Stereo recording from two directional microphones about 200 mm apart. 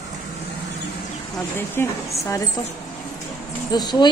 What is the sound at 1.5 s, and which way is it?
Speech, 10° left (ahead or behind).